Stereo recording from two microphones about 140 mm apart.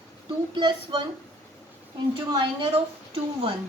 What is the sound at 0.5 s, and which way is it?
Speech, 35° right (ahead or behind).